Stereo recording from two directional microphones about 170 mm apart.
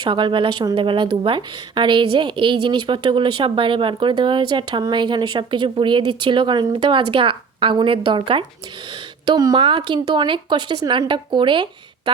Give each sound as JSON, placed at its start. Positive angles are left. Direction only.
{"t": 0.0, "sound": "speech", "side_deg": -30}